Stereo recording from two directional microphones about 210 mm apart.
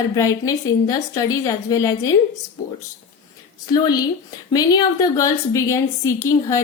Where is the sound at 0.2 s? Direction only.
15° left (ahead or behind).